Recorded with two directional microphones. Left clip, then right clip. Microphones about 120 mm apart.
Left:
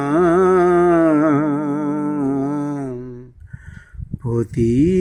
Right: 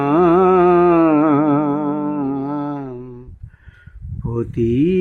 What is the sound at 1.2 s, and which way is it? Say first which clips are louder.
Music: right 2 dB; 20° left (ahead or behind).